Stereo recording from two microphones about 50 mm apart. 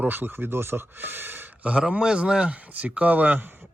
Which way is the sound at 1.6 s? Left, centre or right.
Right.